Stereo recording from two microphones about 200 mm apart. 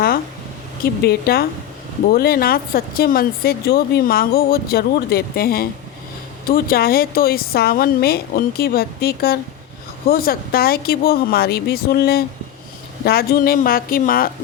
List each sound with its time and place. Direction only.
1.0 s speech: 50° left (ahead or behind)